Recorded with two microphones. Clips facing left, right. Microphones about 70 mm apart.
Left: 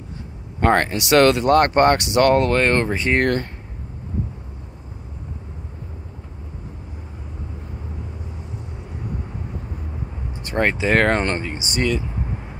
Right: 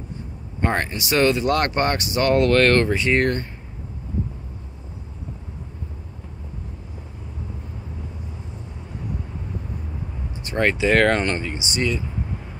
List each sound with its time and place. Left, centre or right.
0.7 s speech: left
1.5 s speech: left
2.0 s speech: left
2.5 s speech: centre
2.9 s speech: left
10.6 s speech: left